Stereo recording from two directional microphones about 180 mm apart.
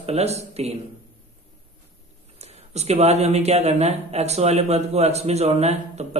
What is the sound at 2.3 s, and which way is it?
Speech, 35° right (ahead or behind).